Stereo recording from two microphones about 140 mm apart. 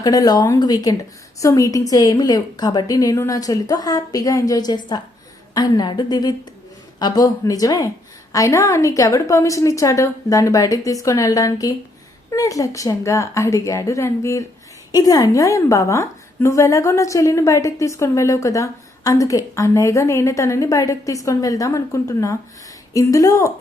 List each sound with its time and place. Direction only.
0.0 s a woman's voice: 25° left (ahead or behind)